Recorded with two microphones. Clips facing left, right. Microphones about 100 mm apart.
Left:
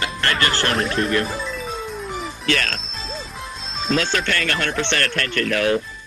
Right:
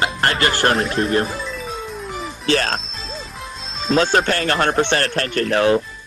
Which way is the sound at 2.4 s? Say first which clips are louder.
Right 5 dB; 35° right (ahead or behind).